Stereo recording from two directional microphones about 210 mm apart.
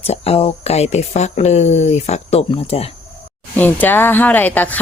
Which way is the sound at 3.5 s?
10° left (ahead or behind).